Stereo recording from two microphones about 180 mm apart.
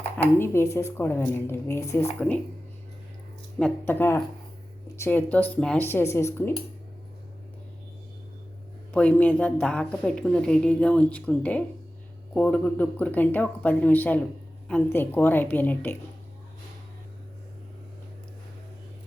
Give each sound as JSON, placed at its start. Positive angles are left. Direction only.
{"t": 0.2, "sound": "a woman's voice", "side_deg": 15}
{"t": 3.6, "sound": "a woman's voice", "side_deg": 10}
{"t": 8.9, "sound": "a woman's voice", "side_deg": 10}